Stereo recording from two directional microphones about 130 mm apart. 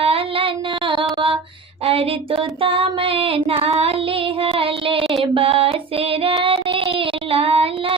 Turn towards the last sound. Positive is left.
turn(degrees=-45)  # may be behind; listen again after turning